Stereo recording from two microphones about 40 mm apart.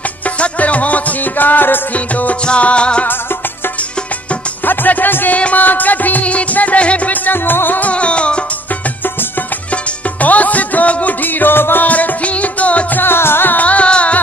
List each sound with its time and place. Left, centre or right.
0.4 s music: left
2.4 s music: left
4.6 s music: left
5.3 s music: left
7.2 s music: left
7.8 s music: left
10.2 s music: left
11.2 s music: left
11.8 s music: left
12.9 s music: left
13.6 s music: left